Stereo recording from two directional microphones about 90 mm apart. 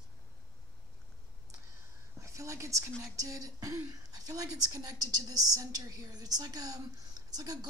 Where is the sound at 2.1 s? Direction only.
35° right (ahead or behind).